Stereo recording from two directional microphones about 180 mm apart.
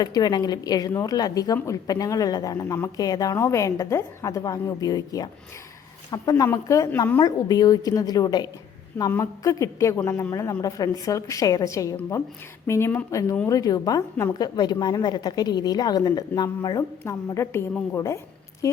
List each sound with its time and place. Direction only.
0.0 s a woman's voice: 20° left (ahead or behind)